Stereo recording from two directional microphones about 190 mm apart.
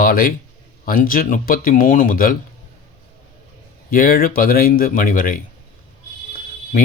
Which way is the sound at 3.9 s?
50° left (ahead or behind).